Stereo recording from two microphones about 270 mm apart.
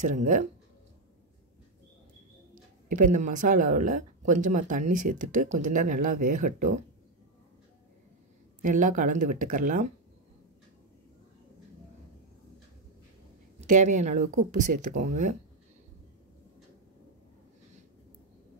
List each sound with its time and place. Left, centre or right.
0.0 s speech: right
3.0 s speech: right
8.6 s speech: right
13.6 s speech: right